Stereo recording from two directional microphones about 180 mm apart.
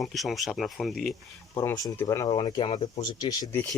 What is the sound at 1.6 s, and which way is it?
Speech, 20° left (ahead or behind).